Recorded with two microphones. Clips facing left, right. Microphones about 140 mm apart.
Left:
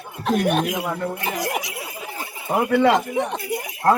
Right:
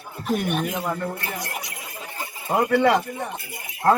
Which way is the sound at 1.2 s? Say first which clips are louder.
Left 6 dB; 90° left.